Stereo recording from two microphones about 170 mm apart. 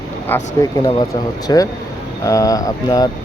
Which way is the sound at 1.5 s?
25° left (ahead or behind).